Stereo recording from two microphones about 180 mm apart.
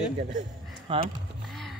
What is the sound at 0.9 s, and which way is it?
Speech, 30° right (ahead or behind).